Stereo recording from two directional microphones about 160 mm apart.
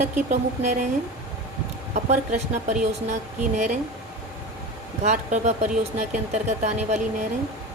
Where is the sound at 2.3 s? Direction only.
45° right (ahead or behind).